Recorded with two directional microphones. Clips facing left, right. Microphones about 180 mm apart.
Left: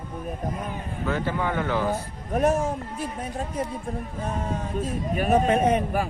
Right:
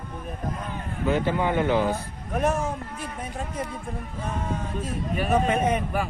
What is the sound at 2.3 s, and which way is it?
Speech, 40° left (ahead or behind).